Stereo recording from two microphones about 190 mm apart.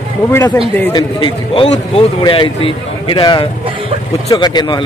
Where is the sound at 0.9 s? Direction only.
25° left (ahead or behind).